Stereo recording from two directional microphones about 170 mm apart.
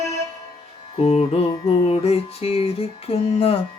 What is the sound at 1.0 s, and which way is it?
Music, 40° left (ahead or behind).